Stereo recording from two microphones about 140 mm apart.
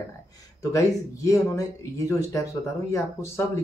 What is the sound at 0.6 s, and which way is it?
Speech, 20° left (ahead or behind).